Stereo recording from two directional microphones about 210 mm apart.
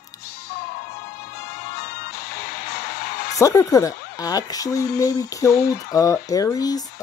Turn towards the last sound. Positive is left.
turn(degrees=15)  # may be behind; listen again after turning